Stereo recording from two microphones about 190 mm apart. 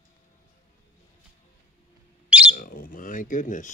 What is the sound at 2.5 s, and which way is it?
Speech, 50° left (ahead or behind).